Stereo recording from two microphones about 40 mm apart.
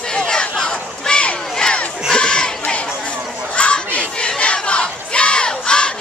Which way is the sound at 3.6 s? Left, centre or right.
Left.